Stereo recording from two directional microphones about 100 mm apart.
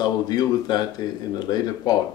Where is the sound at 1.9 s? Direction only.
40° left (ahead or behind).